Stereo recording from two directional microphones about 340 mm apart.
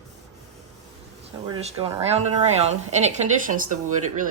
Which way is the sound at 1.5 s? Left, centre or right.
Centre.